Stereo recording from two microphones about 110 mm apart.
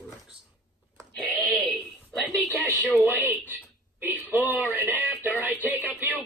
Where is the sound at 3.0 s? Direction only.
15° right (ahead or behind).